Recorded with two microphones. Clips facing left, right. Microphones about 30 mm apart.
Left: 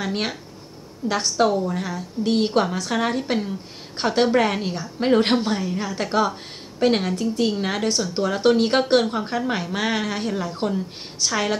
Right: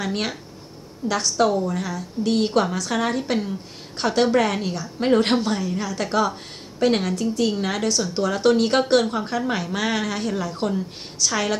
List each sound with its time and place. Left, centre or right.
0.0 s a woman's voice: centre
1.5 s a woman's voice: centre
1.8 s a woman's voice: centre
7.1 s a woman's voice: left